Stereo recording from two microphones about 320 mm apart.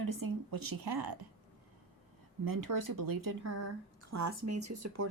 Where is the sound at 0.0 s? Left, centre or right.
Right.